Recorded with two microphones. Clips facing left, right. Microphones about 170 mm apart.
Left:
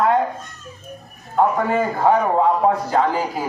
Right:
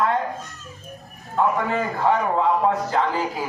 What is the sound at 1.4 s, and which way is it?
A man's voice, 40° left (ahead or behind).